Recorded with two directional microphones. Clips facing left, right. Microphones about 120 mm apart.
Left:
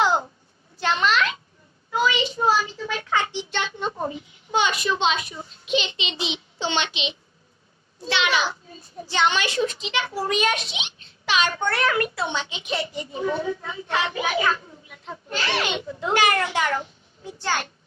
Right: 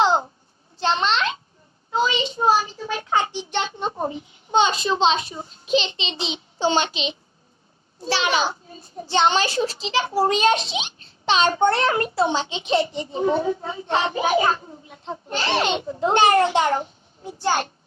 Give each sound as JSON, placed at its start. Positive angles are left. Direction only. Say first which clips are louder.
{"t": 0.0, "sound": "a sound", "louder": "right 2 dB", "side_deg": -25}
{"t": 1.9, "sound": "a child's voice", "louder": "even", "side_deg": -25}
{"t": 3.3, "sound": "a child's voice", "louder": "right 2 dB", "side_deg": -20}